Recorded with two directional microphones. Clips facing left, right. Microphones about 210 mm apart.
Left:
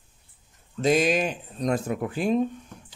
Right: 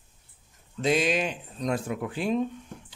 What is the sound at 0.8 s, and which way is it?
Speech, 45° left (ahead or behind).